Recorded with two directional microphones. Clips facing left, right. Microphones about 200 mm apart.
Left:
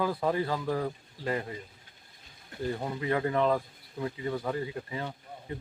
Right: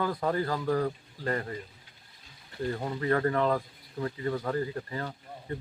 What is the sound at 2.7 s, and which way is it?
Speech, 5° left (ahead or behind).